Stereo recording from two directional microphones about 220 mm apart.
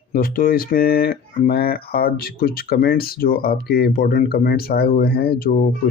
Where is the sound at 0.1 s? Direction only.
40° left (ahead or behind).